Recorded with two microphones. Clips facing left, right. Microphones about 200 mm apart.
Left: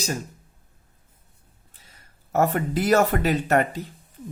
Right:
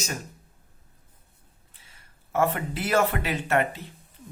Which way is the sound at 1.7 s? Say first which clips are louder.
Left 4 dB; 40° left (ahead or behind).